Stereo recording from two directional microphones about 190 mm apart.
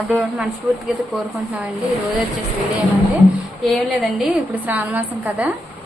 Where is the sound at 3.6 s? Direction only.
Centre (ahead or behind).